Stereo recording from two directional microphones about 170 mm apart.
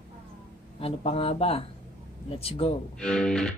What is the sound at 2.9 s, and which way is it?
Speech, 5° left (ahead or behind).